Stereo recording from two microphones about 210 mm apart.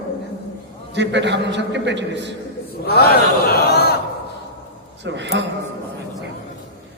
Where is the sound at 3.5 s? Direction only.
50° left (ahead or behind).